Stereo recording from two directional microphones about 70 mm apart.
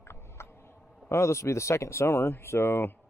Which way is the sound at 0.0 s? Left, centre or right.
Left.